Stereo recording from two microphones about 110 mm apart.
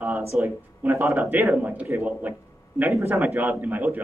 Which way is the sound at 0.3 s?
20° right (ahead or behind).